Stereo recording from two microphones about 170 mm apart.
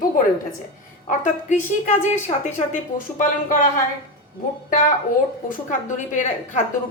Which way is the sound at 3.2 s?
50° left (ahead or behind).